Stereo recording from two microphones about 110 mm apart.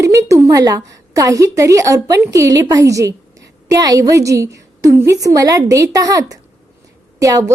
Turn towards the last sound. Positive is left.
turn(degrees=-30)  # may be behind; listen again after turning